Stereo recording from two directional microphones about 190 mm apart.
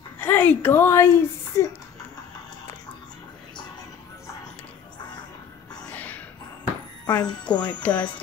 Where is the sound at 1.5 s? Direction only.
15° left (ahead or behind).